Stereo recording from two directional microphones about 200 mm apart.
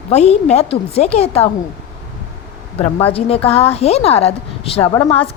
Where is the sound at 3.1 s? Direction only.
30° left (ahead or behind).